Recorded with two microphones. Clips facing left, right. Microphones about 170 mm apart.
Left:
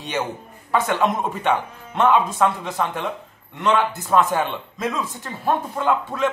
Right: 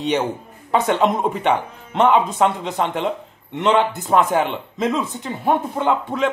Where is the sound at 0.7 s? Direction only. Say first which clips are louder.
Right 3 dB; 20° right (ahead or behind).